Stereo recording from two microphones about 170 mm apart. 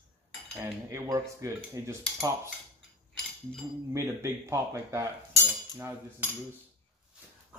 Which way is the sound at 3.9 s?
15° right (ahead or behind).